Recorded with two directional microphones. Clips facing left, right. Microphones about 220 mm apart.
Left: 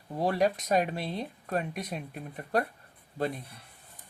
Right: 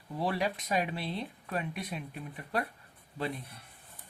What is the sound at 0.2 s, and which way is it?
Speech, 45° left (ahead or behind).